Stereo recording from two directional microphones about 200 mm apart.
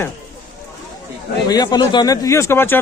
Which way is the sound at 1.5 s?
20° left (ahead or behind).